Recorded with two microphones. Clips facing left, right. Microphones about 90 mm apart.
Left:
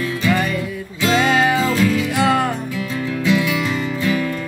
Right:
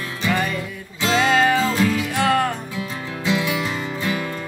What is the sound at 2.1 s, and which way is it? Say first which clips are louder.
Music: left 1 dB; 10° left (ahead or behind).